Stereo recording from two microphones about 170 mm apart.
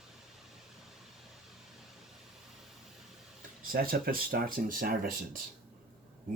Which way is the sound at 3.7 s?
60° right (ahead or behind).